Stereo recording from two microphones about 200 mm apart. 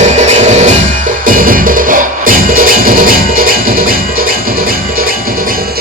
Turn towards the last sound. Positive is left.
turn(degrees=-45)  # may be behind; listen again after turning